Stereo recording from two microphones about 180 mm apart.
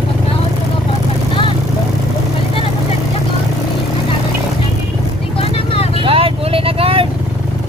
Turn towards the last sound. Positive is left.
turn(degrees=-30)  # may be behind; listen again after turning